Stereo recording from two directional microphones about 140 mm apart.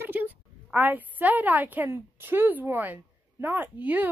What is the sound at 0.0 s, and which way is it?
A woman's voice, 15° right (ahead or behind).